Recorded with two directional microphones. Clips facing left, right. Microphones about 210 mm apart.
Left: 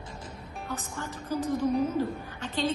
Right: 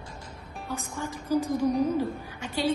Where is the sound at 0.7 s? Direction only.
10° right (ahead or behind).